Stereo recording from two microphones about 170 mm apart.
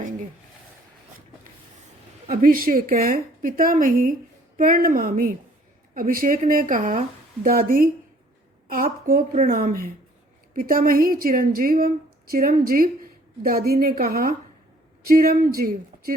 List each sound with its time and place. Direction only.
2.2 s a woman's voice: 55° right (ahead or behind)